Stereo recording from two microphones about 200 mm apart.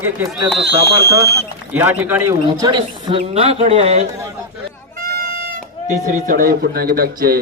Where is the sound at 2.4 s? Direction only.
20° right (ahead or behind).